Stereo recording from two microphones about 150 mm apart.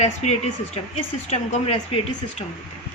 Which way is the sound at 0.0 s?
50° left (ahead or behind).